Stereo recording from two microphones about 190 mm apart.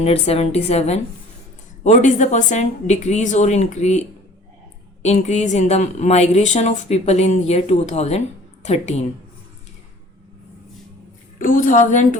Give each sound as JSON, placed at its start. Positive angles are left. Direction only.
{"t": 0.0, "sound": "speech", "side_deg": 30}
{"t": 5.0, "sound": "speech", "side_deg": 35}
{"t": 11.3, "sound": "a woman's voice", "side_deg": 45}